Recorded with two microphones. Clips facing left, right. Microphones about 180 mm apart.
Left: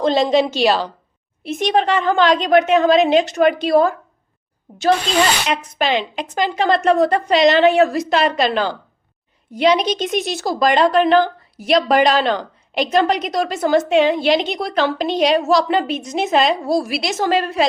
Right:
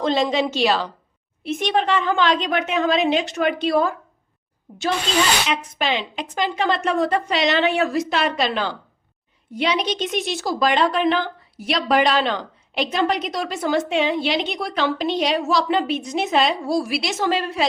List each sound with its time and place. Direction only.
0.0 s a woman's voice: 40° left (ahead or behind)
6.2 s a woman's voice: 40° left (ahead or behind)